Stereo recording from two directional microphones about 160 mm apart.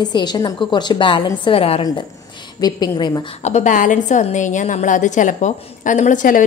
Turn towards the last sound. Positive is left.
turn(degrees=55)  # may be behind; listen again after turning